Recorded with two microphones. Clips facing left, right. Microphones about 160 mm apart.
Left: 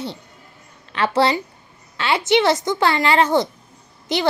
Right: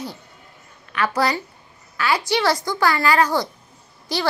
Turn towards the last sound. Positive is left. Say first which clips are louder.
# left 3 dB
turn(degrees=20)  # may be behind; listen again after turning